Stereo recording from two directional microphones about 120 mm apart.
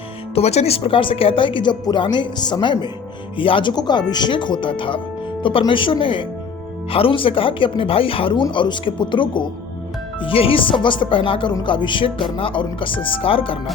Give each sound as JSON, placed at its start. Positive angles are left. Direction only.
{"t": 0.3, "sound": "speech", "side_deg": 60}